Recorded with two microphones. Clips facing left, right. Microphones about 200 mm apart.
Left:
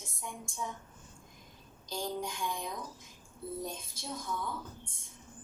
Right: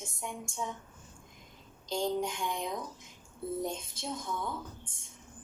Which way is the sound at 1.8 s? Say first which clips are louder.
Right 5 dB; 20° right (ahead or behind).